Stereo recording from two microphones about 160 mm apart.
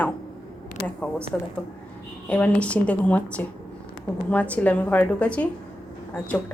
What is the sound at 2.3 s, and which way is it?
A woman's voice, 10° left (ahead or behind).